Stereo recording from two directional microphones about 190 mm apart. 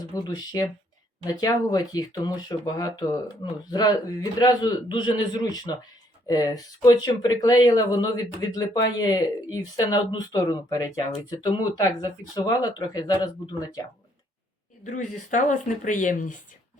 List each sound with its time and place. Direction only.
0.1 s speech: 20° left (ahead or behind)
14.8 s speech: 40° left (ahead or behind)